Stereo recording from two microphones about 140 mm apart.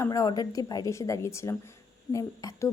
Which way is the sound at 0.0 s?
25° left (ahead or behind).